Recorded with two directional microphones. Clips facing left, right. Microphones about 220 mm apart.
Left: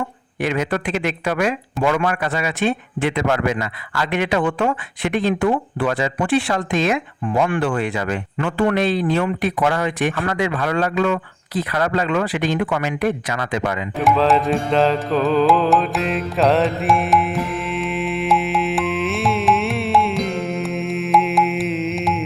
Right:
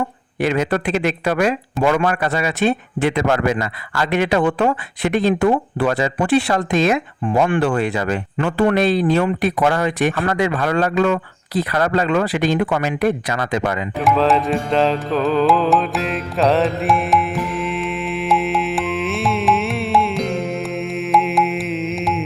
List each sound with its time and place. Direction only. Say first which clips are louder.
0.4 s speech: right 3 dB; 35° right (ahead or behind)
14.0 s music: even; centre (ahead or behind)